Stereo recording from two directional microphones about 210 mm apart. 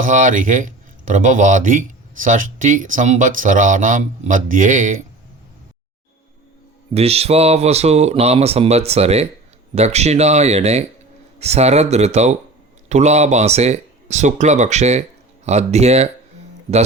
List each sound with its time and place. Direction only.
0.0 s speech: 40° right (ahead or behind)
6.9 s speech: 30° right (ahead or behind)